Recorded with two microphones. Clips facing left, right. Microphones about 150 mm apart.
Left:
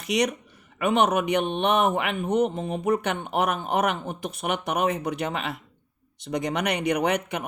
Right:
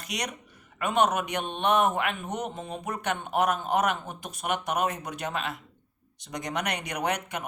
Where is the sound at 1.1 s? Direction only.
60° left (ahead or behind).